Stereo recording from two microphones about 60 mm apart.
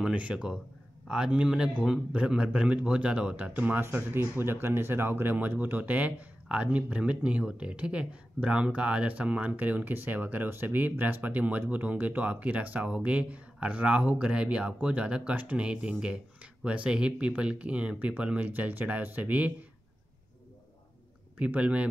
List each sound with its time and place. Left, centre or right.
0.0 s a man's voice: right
3.8 s a man's voice: right
21.4 s speech: right